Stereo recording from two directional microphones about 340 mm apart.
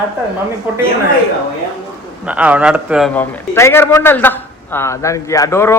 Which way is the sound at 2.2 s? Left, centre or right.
Centre.